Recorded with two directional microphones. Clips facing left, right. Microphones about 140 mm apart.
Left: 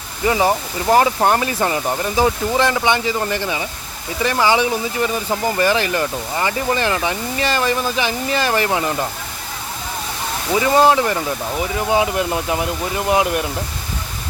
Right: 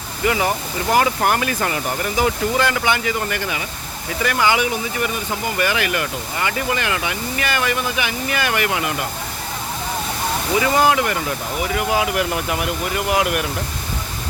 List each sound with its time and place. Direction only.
0.3 s speech: 30° left (ahead or behind)
10.6 s speech: 25° left (ahead or behind)